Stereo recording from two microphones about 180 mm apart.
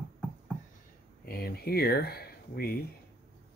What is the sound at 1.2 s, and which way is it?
Speech, 60° left (ahead or behind).